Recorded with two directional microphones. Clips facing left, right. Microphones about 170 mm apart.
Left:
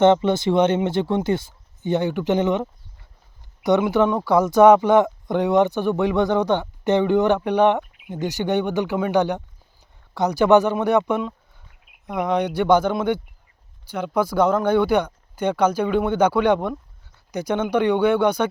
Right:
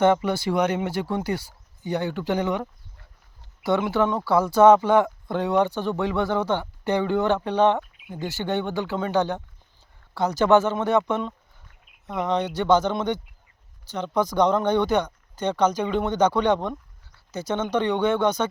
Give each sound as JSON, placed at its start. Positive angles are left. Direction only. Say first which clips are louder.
{"t": 0.0, "sound": "speech", "louder": "left 4 dB", "side_deg": 25}